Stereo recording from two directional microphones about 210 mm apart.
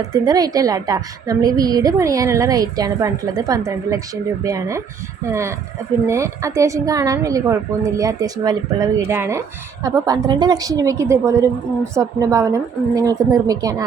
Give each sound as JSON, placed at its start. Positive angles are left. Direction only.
{"t": 0.1, "sound": "a woman's voice", "side_deg": -15}